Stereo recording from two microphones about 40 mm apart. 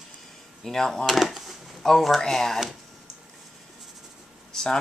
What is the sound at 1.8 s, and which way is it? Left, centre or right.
Speech, centre.